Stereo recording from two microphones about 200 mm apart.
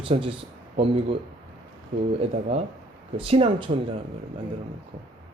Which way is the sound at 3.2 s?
30° right (ahead or behind).